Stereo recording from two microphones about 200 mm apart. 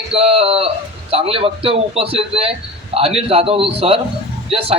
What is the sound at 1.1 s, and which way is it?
Speech, 30° right (ahead or behind).